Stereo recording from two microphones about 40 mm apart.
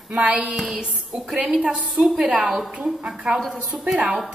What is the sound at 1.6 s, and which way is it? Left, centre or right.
Speech, right.